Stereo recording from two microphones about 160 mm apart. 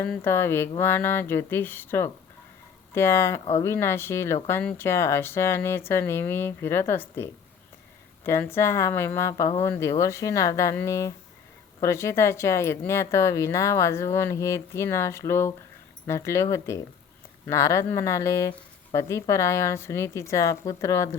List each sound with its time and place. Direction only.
0.0 s a woman's voice: 10° left (ahead or behind)